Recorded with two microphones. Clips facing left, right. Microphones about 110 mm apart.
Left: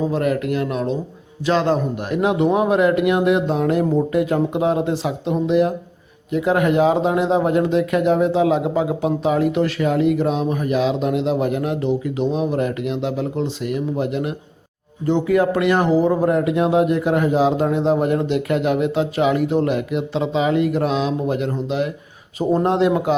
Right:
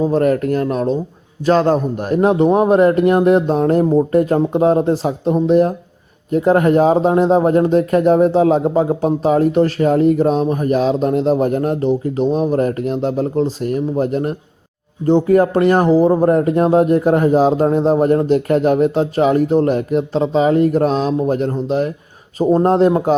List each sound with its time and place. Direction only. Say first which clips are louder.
0.1 s speech: right 5 dB; 40° right (ahead or behind)